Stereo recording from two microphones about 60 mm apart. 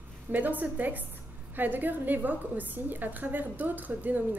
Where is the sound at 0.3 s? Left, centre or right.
Right.